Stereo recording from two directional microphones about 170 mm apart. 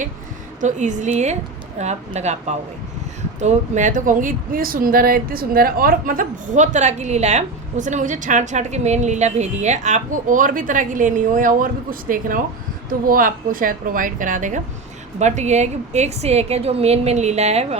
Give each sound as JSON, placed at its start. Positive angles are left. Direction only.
{"t": 0.6, "sound": "a woman's voice", "side_deg": -45}